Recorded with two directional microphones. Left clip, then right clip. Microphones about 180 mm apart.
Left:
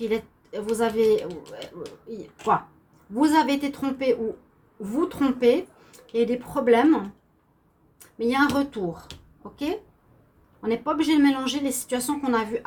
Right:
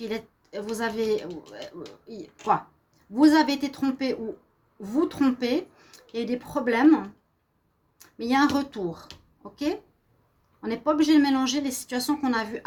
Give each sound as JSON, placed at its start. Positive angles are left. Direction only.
{"t": 0.1, "sound": "a woman's voice", "side_deg": -65}
{"t": 3.2, "sound": "a woman's voice", "side_deg": -60}
{"t": 10.6, "sound": "a woman's voice", "side_deg": -60}